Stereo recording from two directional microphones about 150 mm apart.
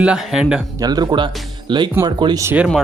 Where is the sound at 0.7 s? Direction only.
25° right (ahead or behind).